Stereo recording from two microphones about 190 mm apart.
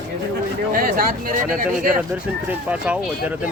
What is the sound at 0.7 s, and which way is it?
Speech, 50° right (ahead or behind).